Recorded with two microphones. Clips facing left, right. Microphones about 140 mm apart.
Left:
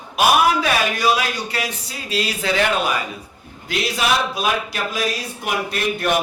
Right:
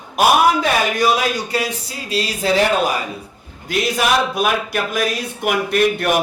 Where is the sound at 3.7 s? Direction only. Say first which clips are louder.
Right 3 dB; 50° right (ahead or behind).